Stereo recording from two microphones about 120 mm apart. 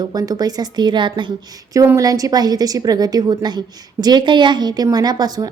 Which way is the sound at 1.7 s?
25° right (ahead or behind).